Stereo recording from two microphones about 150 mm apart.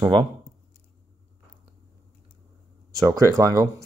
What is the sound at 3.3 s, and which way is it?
Speech, 20° right (ahead or behind).